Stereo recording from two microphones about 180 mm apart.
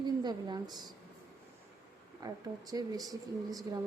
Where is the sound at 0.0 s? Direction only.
25° right (ahead or behind).